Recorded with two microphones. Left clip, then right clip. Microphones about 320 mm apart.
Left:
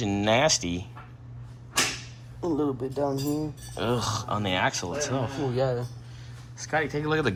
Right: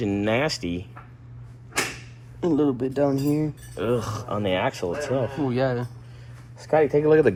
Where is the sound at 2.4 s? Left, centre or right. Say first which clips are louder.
Right 5 dB; right.